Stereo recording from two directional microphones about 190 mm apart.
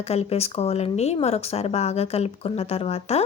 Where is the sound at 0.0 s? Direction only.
35° left (ahead or behind).